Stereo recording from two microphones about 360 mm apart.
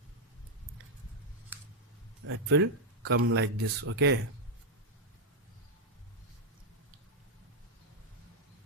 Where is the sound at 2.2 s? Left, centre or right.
Right.